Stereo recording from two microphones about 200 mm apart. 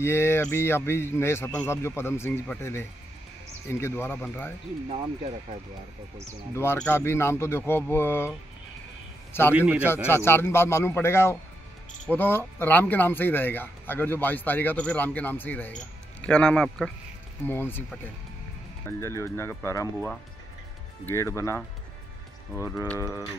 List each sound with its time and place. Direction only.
0.0 s speech: 10° left (ahead or behind)
4.8 s speech: 30° right (ahead or behind)
6.5 s speech: 10° left (ahead or behind)
9.5 s speech: 5° right (ahead or behind)
10.0 s a man's voice: 10° left (ahead or behind)